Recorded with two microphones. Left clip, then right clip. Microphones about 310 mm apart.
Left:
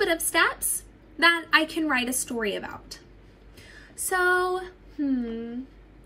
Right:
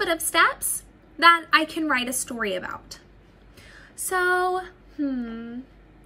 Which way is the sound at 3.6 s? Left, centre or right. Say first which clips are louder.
Even; right.